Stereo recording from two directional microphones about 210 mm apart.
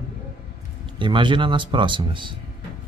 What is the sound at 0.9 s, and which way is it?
Speech, 25° right (ahead or behind).